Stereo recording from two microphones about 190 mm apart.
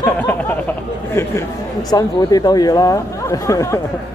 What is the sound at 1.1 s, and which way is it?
Speech, 15° left (ahead or behind).